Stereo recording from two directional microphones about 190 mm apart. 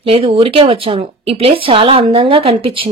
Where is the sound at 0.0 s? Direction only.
30° right (ahead or behind).